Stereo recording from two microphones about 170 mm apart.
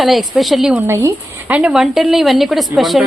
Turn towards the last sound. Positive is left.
turn(degrees=0)  # may be behind; listen again after turning